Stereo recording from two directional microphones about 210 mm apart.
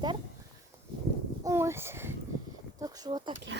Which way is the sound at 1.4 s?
15° right (ahead or behind).